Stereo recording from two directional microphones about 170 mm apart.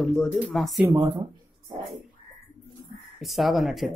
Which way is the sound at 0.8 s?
25° right (ahead or behind).